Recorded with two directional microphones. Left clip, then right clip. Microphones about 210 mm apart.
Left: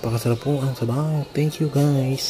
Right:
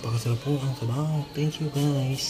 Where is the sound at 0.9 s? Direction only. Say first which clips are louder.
Left 6 dB; 20° left (ahead or behind).